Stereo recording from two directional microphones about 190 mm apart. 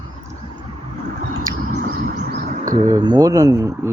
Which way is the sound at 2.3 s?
50° right (ahead or behind).